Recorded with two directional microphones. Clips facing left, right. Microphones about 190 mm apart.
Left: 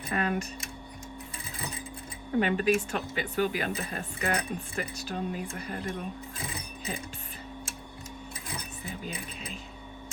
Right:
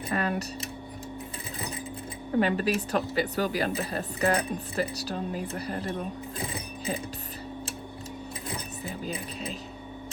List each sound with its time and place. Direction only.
0.1 s speech: 40° right (ahead or behind)
2.4 s speech: 40° right (ahead or behind)